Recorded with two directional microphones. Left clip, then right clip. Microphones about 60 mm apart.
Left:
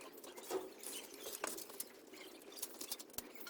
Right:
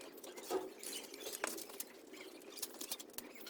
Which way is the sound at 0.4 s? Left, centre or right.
Right.